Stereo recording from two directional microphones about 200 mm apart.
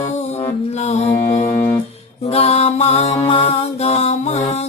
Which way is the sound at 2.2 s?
30° left (ahead or behind).